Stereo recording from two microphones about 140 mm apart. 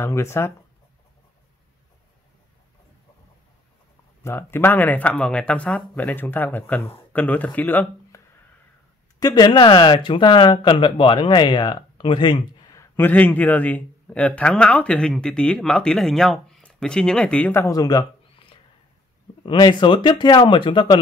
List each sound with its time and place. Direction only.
0.0 s speech: 20° left (ahead or behind)
4.2 s a man's voice: 15° left (ahead or behind)
9.2 s speech: 30° left (ahead or behind)
12.9 s a man's voice: 10° left (ahead or behind)
19.4 s speech: 35° left (ahead or behind)